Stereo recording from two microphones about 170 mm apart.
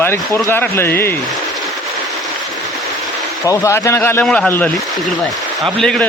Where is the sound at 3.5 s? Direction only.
15° left (ahead or behind).